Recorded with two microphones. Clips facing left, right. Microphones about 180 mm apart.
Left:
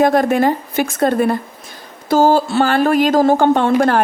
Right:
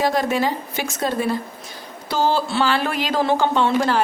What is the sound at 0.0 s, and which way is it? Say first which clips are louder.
Speech: left 7 dB; 55° left (ahead or behind).